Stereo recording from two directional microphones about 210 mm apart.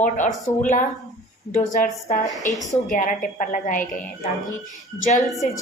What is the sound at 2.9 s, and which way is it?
Speech, 40° left (ahead or behind).